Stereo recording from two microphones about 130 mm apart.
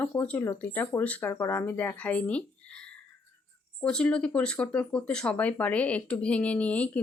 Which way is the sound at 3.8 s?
10° left (ahead or behind).